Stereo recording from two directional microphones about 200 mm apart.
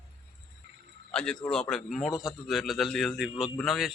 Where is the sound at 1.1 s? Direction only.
5° left (ahead or behind).